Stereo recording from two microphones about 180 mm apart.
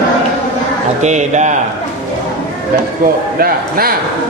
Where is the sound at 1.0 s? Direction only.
40° right (ahead or behind).